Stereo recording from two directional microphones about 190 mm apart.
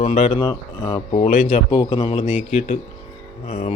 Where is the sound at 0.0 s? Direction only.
35° left (ahead or behind).